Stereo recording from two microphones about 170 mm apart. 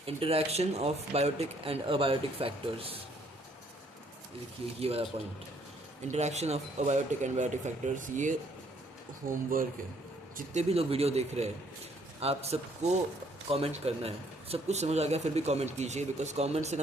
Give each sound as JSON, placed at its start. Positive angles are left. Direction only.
{"t": 0.0, "sound": "speech", "side_deg": -35}
{"t": 4.8, "sound": "speech", "side_deg": -35}
{"t": 6.1, "sound": "speech", "side_deg": -40}
{"t": 10.3, "sound": "speech", "side_deg": -40}